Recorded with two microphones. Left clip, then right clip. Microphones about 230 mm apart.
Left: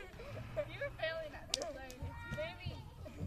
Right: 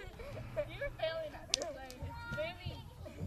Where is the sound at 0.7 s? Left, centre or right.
Centre.